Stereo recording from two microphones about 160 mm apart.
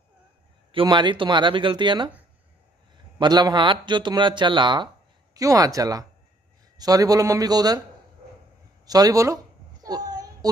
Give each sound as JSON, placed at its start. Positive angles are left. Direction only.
{"t": 0.7, "sound": "speech", "side_deg": -30}
{"t": 3.2, "sound": "speech", "side_deg": -25}
{"t": 8.8, "sound": "speech", "side_deg": -25}
{"t": 9.8, "sound": "child singing", "side_deg": -25}